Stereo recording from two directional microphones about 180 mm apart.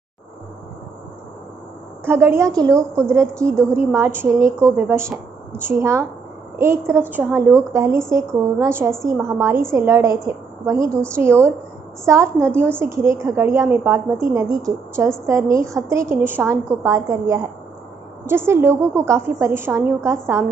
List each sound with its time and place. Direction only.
2.0 s a woman's voice: 15° right (ahead or behind)